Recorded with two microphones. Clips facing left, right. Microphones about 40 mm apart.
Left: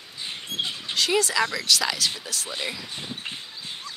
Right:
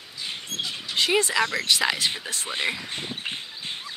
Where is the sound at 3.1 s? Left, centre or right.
Right.